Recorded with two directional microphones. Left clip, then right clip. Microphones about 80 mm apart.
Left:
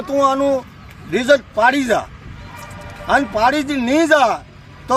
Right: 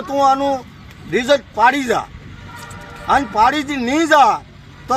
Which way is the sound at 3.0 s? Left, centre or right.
Left.